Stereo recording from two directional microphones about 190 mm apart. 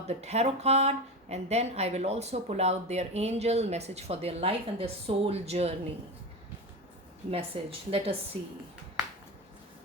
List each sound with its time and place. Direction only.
0.1 s speech: 35° right (ahead or behind)
7.3 s a woman's voice: 30° right (ahead or behind)